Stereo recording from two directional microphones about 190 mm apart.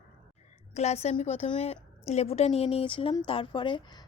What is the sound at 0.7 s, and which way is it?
A woman's voice, 35° left (ahead or behind).